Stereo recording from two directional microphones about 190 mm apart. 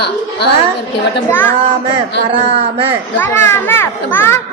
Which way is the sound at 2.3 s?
30° right (ahead or behind).